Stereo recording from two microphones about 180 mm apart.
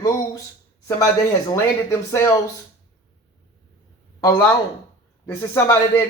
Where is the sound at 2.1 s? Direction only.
15° left (ahead or behind).